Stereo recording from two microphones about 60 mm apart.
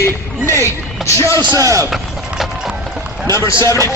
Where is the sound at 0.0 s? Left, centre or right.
Left.